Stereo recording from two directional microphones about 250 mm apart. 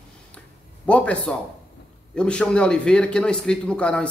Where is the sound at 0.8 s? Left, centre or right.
Centre.